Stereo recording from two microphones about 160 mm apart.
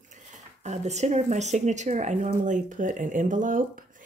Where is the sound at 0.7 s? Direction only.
45° right (ahead or behind).